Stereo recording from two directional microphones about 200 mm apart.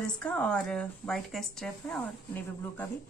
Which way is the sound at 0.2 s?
5° left (ahead or behind).